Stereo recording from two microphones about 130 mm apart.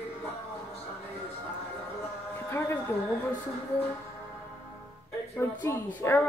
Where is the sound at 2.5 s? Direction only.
20° left (ahead or behind).